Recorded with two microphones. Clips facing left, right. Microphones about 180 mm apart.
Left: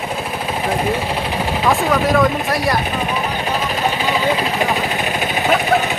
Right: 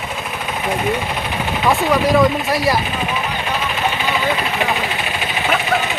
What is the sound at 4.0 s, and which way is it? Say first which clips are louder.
Vehicle: left 2 dB; 35° left (ahead or behind).